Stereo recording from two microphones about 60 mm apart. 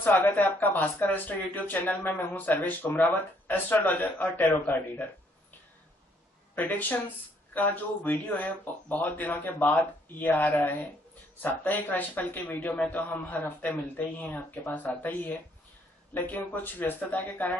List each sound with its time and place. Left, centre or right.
0.3 s speech: left
6.5 s speech: left